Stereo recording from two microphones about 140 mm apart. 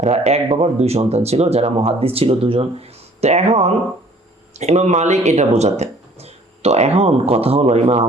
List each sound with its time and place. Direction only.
0.0 s speech: 50° right (ahead or behind)